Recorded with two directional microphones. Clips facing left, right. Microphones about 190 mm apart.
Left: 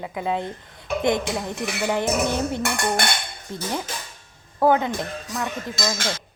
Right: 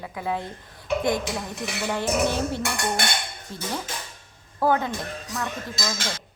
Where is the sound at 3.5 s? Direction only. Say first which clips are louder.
Left 3 dB; 20° left (ahead or behind).